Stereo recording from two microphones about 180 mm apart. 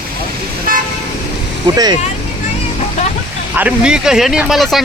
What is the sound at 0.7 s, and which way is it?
Vehicle, 50° right (ahead or behind).